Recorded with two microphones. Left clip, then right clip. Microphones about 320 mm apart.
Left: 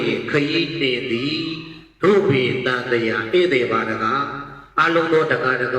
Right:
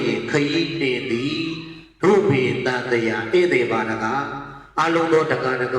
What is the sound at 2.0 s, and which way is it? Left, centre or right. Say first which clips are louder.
A man's voice: left 1 dB; centre.